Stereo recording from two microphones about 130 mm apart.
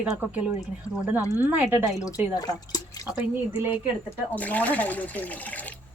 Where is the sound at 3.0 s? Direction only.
15° right (ahead or behind).